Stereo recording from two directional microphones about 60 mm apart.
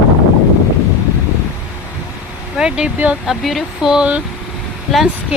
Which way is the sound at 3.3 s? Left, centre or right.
Centre.